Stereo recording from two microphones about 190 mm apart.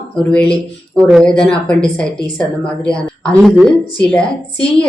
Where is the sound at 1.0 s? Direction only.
Centre (ahead or behind).